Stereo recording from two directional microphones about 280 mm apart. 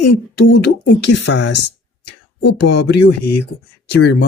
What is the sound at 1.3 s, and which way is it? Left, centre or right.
Speech, left.